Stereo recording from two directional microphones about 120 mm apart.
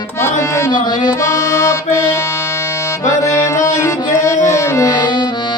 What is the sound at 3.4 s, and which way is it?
Music, 25° left (ahead or behind).